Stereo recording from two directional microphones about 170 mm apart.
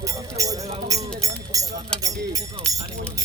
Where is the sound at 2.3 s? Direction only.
20° right (ahead or behind).